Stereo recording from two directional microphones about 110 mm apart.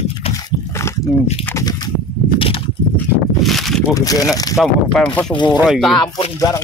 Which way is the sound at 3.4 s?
Centre (ahead or behind).